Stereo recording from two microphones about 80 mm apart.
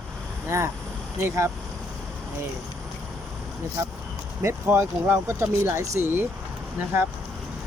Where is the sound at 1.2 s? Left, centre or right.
Right.